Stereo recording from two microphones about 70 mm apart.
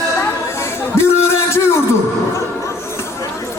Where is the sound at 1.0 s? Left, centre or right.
Left.